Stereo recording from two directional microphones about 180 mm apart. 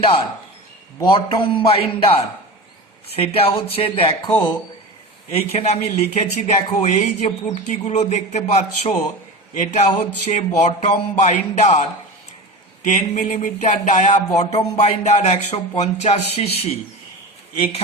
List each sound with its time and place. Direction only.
1.0 s a man's voice: 30° left (ahead or behind)
5.3 s speech: 35° left (ahead or behind)